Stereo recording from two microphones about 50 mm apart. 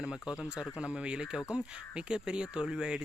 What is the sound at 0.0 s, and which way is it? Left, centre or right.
Speech, centre.